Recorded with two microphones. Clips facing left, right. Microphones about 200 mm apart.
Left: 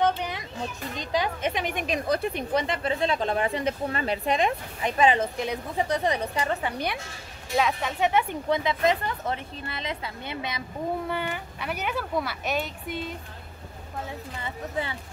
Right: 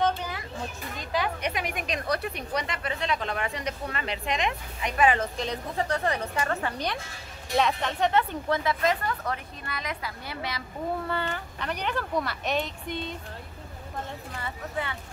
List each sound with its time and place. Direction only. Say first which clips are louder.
0.0 s children playing: left 2 dB; 15° left (ahead or behind)
1.5 s a woman's voice: left 3 dB; centre (ahead or behind)
2.5 s speech: left 5 dB; 30° left (ahead or behind)
5.2 s speech: left 2 dB; 10° left (ahead or behind)
14.4 s speech: left 2 dB; 30° left (ahead or behind)